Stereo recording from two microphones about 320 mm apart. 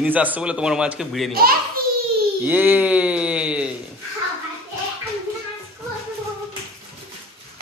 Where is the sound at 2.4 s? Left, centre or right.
Centre.